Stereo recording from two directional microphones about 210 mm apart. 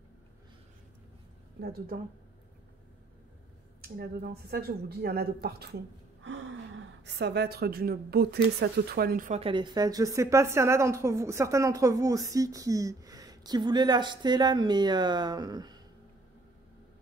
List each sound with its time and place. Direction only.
1.6 s speech: 45° right (ahead or behind)
3.8 s speech: 50° right (ahead or behind)
6.2 s gasp: 60° right (ahead or behind)
7.2 s speech: 50° right (ahead or behind)
9.4 s a woman's voice: 20° right (ahead or behind)